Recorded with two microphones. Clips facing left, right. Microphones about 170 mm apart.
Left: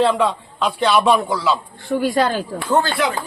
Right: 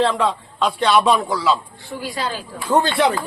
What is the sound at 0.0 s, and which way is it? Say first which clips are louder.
A man's voice: left 2 dB; 5° left (ahead or behind).